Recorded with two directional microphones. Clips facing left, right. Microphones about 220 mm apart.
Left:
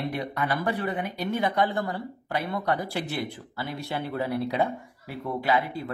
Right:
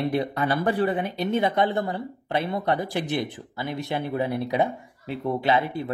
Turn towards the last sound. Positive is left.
turn(degrees=-20)  # may be behind; listen again after turning